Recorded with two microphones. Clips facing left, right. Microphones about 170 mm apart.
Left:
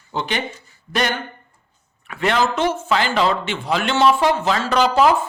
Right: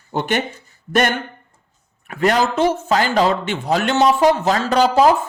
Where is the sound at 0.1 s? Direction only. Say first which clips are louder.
Right 4 dB; 50° right (ahead or behind).